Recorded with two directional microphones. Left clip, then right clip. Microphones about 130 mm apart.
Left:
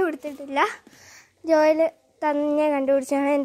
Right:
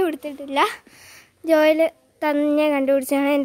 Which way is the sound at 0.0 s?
25° right (ahead or behind).